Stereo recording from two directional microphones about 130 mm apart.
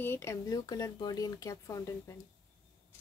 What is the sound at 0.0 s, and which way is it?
Speech, 20° left (ahead or behind).